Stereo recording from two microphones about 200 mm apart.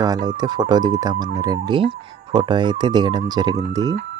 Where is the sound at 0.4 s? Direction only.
20° right (ahead or behind).